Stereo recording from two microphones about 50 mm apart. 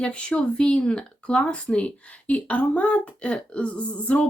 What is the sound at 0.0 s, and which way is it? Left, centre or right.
Speech, left.